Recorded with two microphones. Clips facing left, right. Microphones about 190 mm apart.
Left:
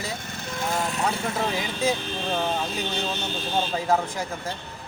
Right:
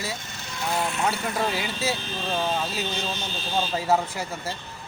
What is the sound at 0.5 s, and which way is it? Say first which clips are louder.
Vehicle: left 1 dB; 50° left (ahead or behind).